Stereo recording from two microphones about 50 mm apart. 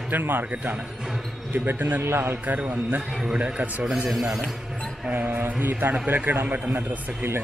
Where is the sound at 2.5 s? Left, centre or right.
Right.